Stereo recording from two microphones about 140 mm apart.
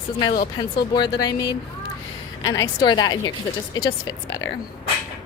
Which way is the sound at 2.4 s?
30° left (ahead or behind).